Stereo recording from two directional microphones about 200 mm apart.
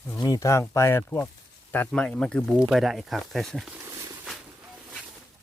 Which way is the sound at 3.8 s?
15° right (ahead or behind).